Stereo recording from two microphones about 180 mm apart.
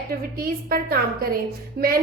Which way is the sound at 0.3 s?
55° right (ahead or behind).